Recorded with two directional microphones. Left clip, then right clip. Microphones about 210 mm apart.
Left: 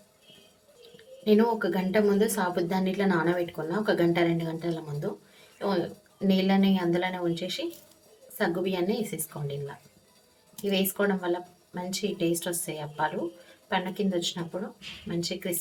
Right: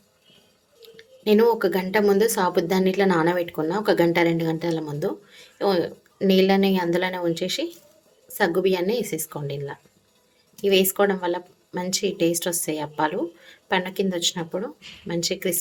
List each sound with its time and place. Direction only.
0.9 s a woman's voice: 45° right (ahead or behind)